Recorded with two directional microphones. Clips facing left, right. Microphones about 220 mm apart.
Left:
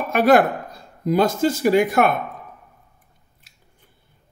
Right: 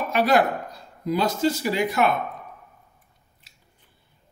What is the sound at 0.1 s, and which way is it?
Speech, 50° left (ahead or behind).